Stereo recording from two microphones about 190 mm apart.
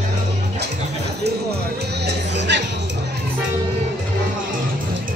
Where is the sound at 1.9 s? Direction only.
60° right (ahead or behind).